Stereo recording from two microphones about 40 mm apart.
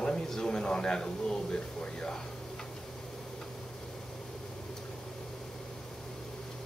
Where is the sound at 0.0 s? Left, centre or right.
Centre.